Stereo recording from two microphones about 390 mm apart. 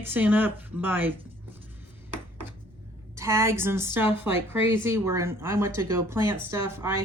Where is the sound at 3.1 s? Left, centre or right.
Centre.